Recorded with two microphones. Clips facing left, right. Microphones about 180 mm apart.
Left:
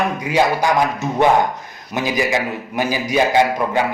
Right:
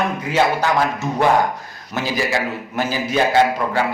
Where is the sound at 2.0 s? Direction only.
15° left (ahead or behind).